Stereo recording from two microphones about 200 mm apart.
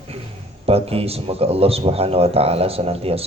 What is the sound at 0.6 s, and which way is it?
Speech, 30° right (ahead or behind).